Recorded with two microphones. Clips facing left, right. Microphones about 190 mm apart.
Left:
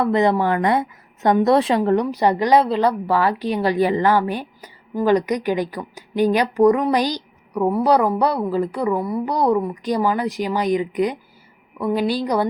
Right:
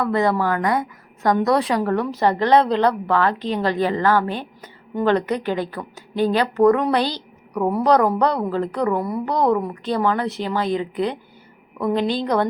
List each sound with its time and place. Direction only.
0.0 s a woman's voice: 20° left (ahead or behind)